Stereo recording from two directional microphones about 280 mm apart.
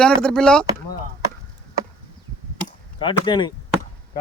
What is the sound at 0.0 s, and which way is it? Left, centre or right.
Speech, centre.